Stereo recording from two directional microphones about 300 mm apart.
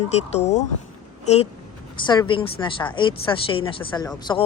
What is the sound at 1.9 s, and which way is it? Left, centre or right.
Speech, centre.